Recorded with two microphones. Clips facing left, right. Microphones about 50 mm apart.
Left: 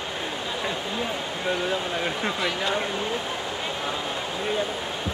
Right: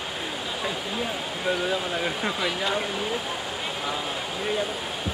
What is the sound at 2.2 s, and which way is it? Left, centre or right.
Speech, centre.